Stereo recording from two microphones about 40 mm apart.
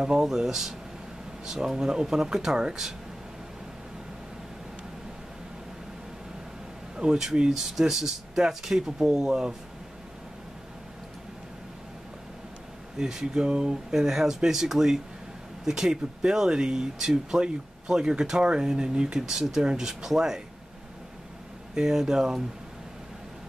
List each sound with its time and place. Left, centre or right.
0.0 s speech: centre
7.0 s speech: centre
12.9 s speech: centre
13.9 s speech: centre
19.1 s speech: centre
21.7 s speech: centre